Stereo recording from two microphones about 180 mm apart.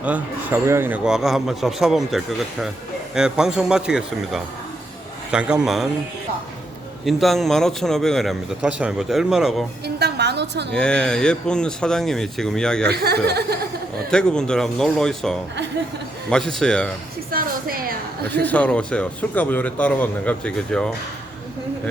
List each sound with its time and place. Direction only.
0.0 s a man's voice: 10° right (ahead or behind)
7.0 s a man's voice: centre (ahead or behind)
9.8 s a woman's voice: 65° right (ahead or behind)
10.8 s a man's voice: 5° left (ahead or behind)
12.9 s speech: 65° right (ahead or behind)
14.1 s a man's voice: 5° left (ahead or behind)
17.3 s a sound: 55° right (ahead or behind)
18.4 s a man's voice: 10° left (ahead or behind)